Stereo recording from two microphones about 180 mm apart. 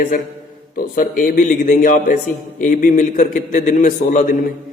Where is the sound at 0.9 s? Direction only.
50° left (ahead or behind).